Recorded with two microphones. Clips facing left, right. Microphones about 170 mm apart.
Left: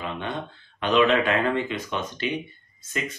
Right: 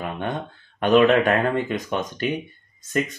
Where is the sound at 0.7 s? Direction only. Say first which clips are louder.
Right 4 dB; 50° right (ahead or behind).